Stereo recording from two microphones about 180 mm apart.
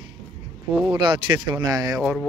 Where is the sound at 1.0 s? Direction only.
25° right (ahead or behind).